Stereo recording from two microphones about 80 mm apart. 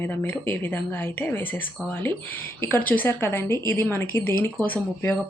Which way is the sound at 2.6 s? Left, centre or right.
Left.